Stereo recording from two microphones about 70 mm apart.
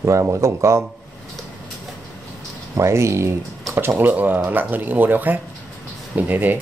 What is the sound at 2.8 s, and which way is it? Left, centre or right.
Speech, right.